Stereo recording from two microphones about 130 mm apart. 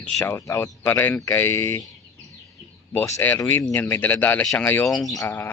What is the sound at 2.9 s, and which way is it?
Speech, 15° left (ahead or behind).